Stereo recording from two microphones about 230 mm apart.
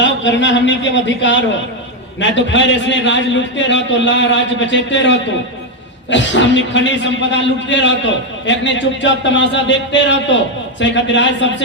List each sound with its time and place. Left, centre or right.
0.0 s speech: left